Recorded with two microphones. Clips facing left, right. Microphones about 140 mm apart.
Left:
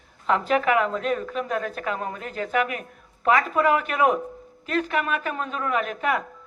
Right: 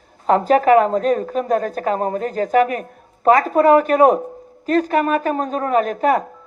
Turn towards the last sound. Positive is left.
turn(degrees=-40)  # may be behind; listen again after turning